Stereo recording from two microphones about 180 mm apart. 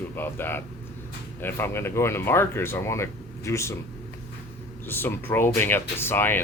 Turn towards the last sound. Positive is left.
turn(degrees=10)  # may be behind; listen again after turning